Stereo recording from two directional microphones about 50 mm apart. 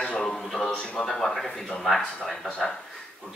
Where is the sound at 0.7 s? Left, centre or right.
Centre.